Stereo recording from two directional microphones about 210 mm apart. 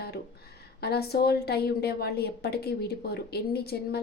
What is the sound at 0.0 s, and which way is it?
A woman's voice, 50° left (ahead or behind).